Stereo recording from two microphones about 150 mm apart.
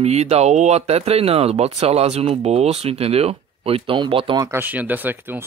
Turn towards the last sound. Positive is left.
turn(degrees=-15)  # may be behind; listen again after turning